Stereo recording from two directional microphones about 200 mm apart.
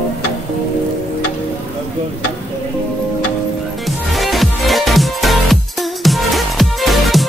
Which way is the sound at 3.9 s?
Centre (ahead or behind).